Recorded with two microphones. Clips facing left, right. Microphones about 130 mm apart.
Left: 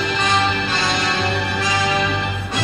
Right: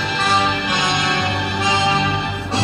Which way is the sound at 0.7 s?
20° right (ahead or behind).